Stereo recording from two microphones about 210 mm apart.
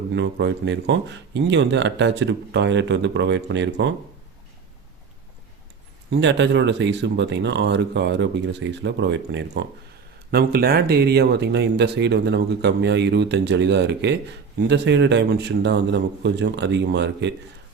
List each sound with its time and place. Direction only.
0.1 s speech: 60° right (ahead or behind)
6.1 s speech: 55° right (ahead or behind)
10.3 s speech: 45° right (ahead or behind)